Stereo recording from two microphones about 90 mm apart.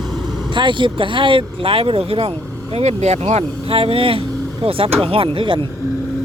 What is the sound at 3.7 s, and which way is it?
Speech, 90° right.